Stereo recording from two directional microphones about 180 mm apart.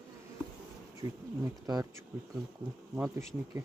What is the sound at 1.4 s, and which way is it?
Speech, 20° right (ahead or behind).